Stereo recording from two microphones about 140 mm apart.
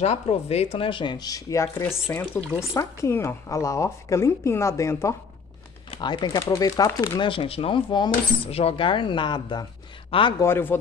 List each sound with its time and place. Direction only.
0.0 s a woman's voice: 50° left (ahead or behind); by 5.1 s 20° left (ahead or behind)
5.9 s speech: 35° left (ahead or behind)
8.5 s speech: 45° left (ahead or behind)
10.4 s speech: 15° left (ahead or behind)